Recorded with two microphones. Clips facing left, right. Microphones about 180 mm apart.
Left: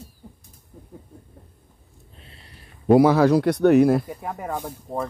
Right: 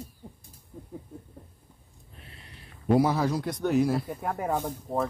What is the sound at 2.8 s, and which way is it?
Speech, 80° left.